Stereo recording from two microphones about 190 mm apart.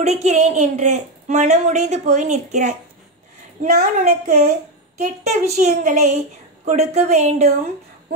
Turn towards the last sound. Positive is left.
turn(degrees=-35)  # may be behind; listen again after turning